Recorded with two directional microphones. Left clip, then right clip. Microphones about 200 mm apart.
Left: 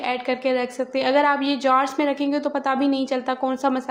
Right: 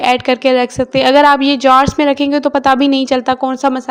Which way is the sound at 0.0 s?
45° right (ahead or behind).